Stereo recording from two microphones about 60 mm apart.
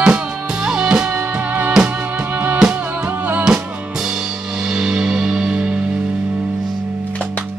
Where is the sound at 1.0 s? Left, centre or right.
Right.